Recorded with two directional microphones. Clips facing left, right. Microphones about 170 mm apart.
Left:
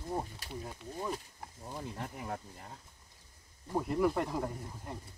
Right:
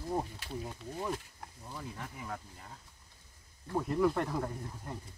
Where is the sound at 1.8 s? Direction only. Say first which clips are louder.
Left 2 dB; 40° left (ahead or behind).